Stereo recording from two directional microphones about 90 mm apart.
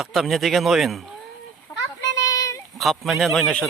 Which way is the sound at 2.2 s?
40° left (ahead or behind).